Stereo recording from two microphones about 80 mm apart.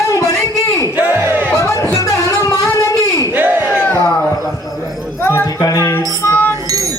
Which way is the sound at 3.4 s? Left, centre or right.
Right.